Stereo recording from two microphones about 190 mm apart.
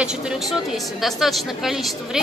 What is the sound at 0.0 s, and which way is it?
A woman's voice, 5° right (ahead or behind).